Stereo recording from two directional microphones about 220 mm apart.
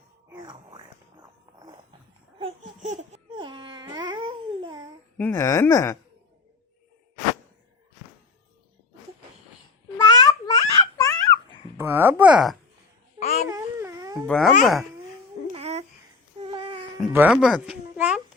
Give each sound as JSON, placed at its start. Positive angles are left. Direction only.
{"t": 0.3, "sound": "a sound", "side_deg": -20}
{"t": 2.4, "sound": "laughter", "side_deg": -30}
{"t": 3.4, "sound": "babbling", "side_deg": -20}
{"t": 5.1, "sound": "speech", "side_deg": 10}
{"t": 10.0, "sound": "babbling", "side_deg": 15}
{"t": 11.8, "sound": "a sound", "side_deg": -10}
{"t": 13.5, "sound": "wail", "side_deg": -15}
{"t": 14.3, "sound": "speech", "side_deg": 0}
{"t": 15.5, "sound": "babbling", "side_deg": -30}
{"t": 16.4, "sound": "a sound", "side_deg": -25}
{"t": 17.0, "sound": "a child's voice", "side_deg": -5}